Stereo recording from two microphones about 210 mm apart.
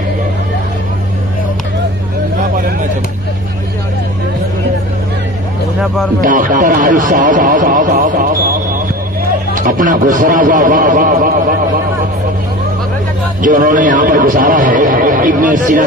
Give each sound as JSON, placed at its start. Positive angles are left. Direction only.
{"t": 6.2, "sound": "a man's voice", "side_deg": -40}
{"t": 9.5, "sound": "a man's voice", "side_deg": -40}
{"t": 13.4, "sound": "a man's voice", "side_deg": -40}